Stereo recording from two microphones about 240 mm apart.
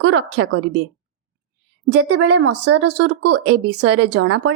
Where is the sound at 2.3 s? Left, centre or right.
Right.